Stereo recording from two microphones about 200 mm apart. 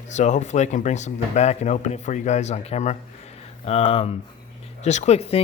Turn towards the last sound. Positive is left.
turn(degrees=30)  # may be behind; listen again after turning